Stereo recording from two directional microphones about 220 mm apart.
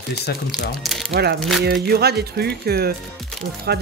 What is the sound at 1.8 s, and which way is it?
Speech, 45° right (ahead or behind).